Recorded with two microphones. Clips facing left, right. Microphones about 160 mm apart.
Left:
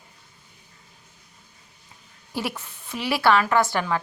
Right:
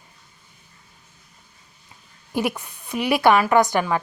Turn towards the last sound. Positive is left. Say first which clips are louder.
# right 4 dB
turn(degrees=-15)  # may be behind; listen again after turning